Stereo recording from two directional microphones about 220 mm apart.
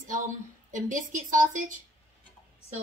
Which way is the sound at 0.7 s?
35° right (ahead or behind).